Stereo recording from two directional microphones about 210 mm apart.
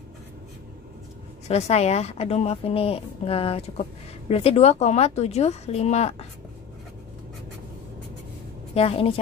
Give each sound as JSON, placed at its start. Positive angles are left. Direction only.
{"t": 1.5, "sound": "a woman's voice", "side_deg": 30}
{"t": 8.7, "sound": "a woman's voice", "side_deg": 30}